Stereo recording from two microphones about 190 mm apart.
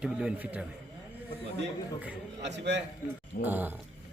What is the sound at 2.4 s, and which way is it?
Speech, 65° right (ahead or behind).